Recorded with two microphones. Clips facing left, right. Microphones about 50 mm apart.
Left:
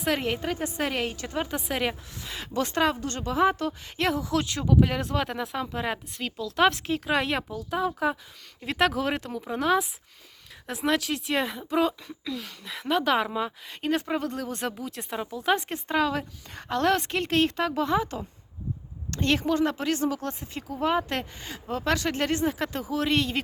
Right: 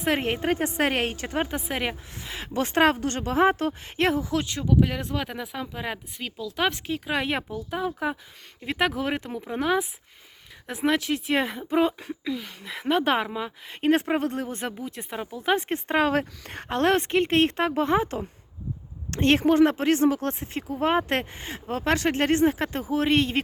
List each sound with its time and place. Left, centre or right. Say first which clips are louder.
0.1 s speech: right 3 dB; right
1.1 s speech: right 3 dB; right
1.5 s speech: even; centre
2.1 s speech: right 1 dB; right
2.7 s speech: right 6 dB; right
4.3 s speech: even; centre
11.3 s speech: right 1 dB; right
13.2 s speech: left 2 dB; centre
13.8 s speech: right 5 dB; right
14.8 s speech: even; centre
15.7 s speech: right 3 dB; right